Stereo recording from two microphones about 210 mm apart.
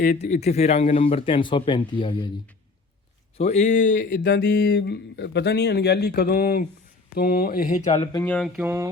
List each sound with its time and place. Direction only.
0.0 s speech: 35° left (ahead or behind)
3.3 s speech: 35° left (ahead or behind)
4.4 s speech: 55° left (ahead or behind)
7.8 s speech: 15° left (ahead or behind)
8.3 s a sound: 5° left (ahead or behind)
8.6 s mantra: 10° right (ahead or behind)